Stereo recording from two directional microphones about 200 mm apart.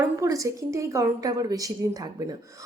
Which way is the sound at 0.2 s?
15° right (ahead or behind).